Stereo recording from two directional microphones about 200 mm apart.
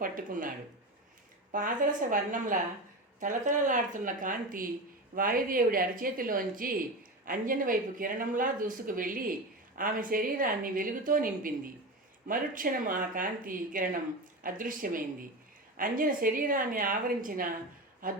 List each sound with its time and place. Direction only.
0.0 s speech: 45° right (ahead or behind)
1.5 s speech: 40° right (ahead or behind)